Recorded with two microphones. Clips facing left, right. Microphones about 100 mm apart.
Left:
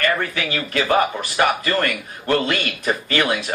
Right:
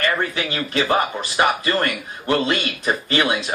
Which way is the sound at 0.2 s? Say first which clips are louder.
Right 1 dB; 25° right (ahead or behind).